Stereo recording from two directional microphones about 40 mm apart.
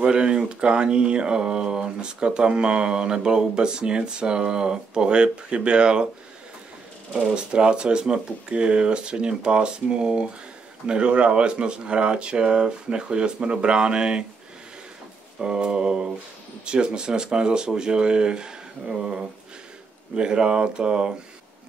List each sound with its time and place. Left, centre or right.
0.0 s speech: right
7.3 s speech: right
15.3 s speech: centre